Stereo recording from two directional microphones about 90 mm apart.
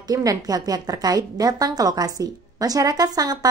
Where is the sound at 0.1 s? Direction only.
45° right (ahead or behind).